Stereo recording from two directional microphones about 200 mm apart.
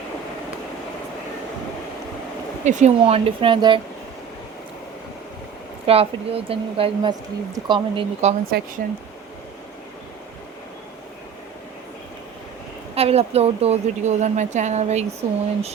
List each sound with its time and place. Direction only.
2.6 s a woman's voice: 35° right (ahead or behind)
5.8 s a woman's voice: 30° right (ahead or behind)
8.4 s speech: 50° right (ahead or behind)
12.9 s a woman's voice: 30° right (ahead or behind)